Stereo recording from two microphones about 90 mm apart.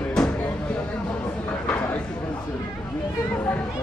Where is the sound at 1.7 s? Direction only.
20° left (ahead or behind).